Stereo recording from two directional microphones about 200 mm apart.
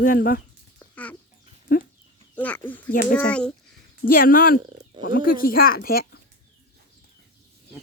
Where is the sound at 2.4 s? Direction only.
10° left (ahead or behind).